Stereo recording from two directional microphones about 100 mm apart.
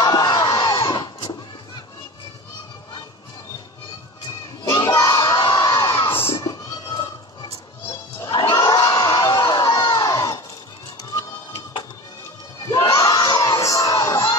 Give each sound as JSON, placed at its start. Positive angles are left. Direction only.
{"t": 0.0, "sound": "crowd", "side_deg": 45}
{"t": 4.6, "sound": "crowd", "side_deg": 35}
{"t": 6.1, "sound": "children shouting", "side_deg": 25}
{"t": 6.4, "sound": "a sound", "side_deg": 40}
{"t": 8.5, "sound": "crowd", "side_deg": 40}
{"t": 11.1, "sound": "a sound", "side_deg": 40}
{"t": 12.9, "sound": "crowd", "side_deg": 40}